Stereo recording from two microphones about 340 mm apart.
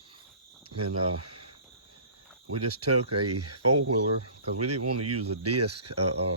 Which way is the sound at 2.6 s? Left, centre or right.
Right.